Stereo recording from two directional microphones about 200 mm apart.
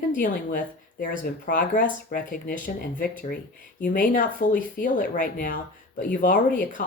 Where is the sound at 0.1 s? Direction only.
45° left (ahead or behind).